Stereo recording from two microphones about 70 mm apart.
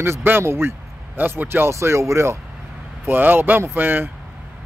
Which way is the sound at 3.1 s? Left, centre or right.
Right.